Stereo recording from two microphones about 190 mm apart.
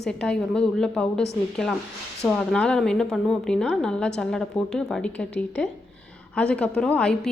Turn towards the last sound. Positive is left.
turn(degrees=5)  # may be behind; listen again after turning